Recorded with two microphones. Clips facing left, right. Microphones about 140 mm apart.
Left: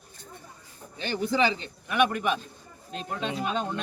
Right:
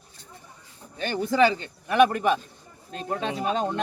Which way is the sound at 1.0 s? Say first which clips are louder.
Right 4 dB; 45° right (ahead or behind).